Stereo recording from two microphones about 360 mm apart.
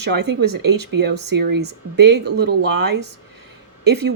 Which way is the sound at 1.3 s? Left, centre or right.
Right.